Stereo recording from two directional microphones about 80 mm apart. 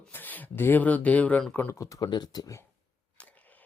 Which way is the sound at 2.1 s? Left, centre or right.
Left.